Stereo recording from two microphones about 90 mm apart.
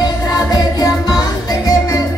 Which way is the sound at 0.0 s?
50° left (ahead or behind).